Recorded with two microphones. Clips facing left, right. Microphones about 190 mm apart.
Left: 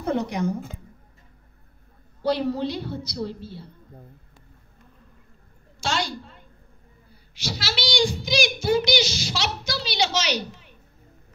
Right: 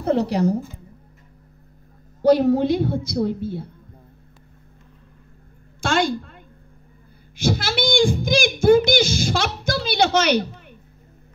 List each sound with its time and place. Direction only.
0.0 s speech: 35° right (ahead or behind)
2.2 s a woman's voice: 45° right (ahead or behind)
5.8 s a sound: 55° right (ahead or behind)
7.3 s speech: 50° right (ahead or behind)